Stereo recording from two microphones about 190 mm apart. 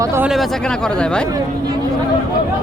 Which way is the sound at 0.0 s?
15° right (ahead or behind).